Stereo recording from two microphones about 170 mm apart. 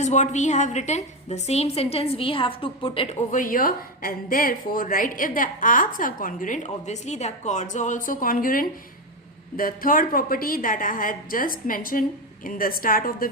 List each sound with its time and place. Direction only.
0.0 s a woman's voice: 45° left (ahead or behind)